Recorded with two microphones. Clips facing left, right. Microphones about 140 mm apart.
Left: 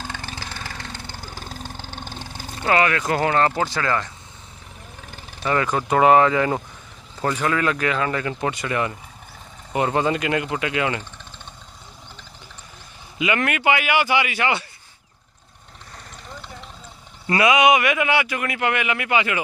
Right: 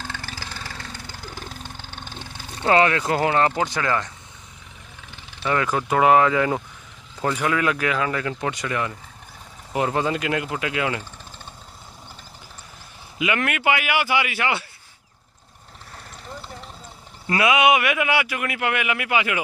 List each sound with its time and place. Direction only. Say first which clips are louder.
0.0 s vehicle: left 1 dB; 20° left (ahead or behind); by 2.4 s 40° left (ahead or behind)
2.6 s speech: right 1 dB; 25° right (ahead or behind)
5.0 s vehicle: left 1 dB; 40° left (ahead or behind)
5.5 s speech: left 1 dB; centre (ahead or behind)
13.2 s speech: left 2 dB; 5° right (ahead or behind)
17.3 s speech: left 2 dB; 5° right (ahead or behind)